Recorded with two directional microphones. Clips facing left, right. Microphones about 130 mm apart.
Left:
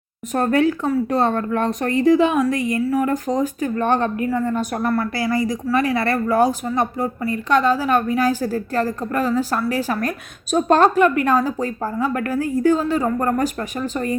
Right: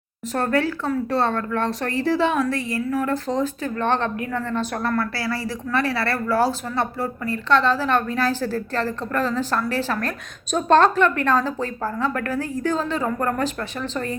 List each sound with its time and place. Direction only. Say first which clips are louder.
0.3 s speech: left 4 dB; 20° left (ahead or behind)